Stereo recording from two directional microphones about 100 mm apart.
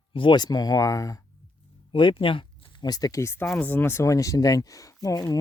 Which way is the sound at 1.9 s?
55° left (ahead or behind).